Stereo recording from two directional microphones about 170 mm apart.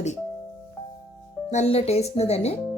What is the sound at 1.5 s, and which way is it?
Speech, 40° left (ahead or behind).